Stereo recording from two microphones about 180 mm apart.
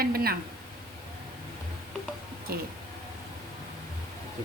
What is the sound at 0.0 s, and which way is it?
Speech, 55° right (ahead or behind).